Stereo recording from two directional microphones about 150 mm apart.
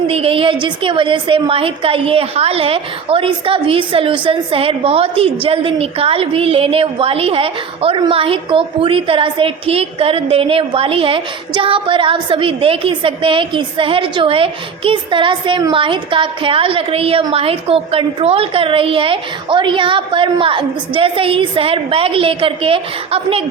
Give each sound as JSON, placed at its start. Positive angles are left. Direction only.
{"t": 0.1, "sound": "a woman's voice", "side_deg": -40}